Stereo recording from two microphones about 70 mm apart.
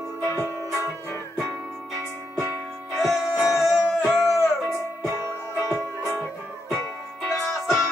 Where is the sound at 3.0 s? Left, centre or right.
Centre.